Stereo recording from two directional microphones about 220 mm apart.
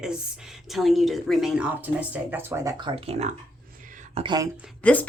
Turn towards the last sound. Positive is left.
turn(degrees=5)  # may be behind; listen again after turning